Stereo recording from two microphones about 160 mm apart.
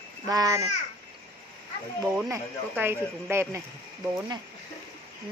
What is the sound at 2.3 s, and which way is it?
Speech, 15° right (ahead or behind).